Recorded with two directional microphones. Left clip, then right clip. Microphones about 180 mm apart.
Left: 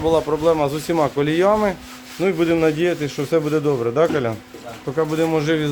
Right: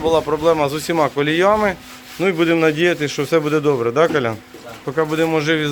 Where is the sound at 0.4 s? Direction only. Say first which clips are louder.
Right 2 dB; 5° left (ahead or behind).